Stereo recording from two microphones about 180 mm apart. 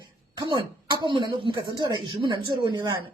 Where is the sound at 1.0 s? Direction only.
25° right (ahead or behind).